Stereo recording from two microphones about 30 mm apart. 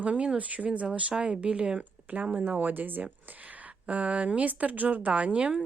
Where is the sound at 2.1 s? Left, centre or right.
Right.